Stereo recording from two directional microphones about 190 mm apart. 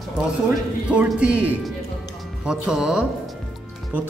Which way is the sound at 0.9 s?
5° right (ahead or behind).